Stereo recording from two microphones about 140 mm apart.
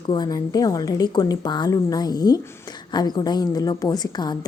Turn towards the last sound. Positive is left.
turn(degrees=30)  # may be behind; listen again after turning